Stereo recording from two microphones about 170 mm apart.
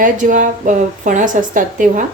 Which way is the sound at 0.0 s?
50° right (ahead or behind).